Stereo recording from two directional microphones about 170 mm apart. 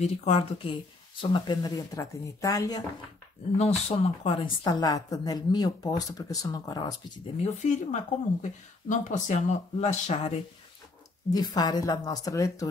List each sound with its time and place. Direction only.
0.0 s a woman's voice: 40° left (ahead or behind); by 2.8 s 20° left (ahead or behind)
3.5 s a woman's voice: 40° left (ahead or behind); by 7.0 s 20° left (ahead or behind)
7.4 s speech: 45° left (ahead or behind)
11.3 s a woman's voice: 25° left (ahead or behind)